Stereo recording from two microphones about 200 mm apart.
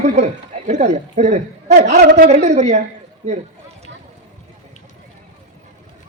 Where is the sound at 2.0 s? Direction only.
55° right (ahead or behind).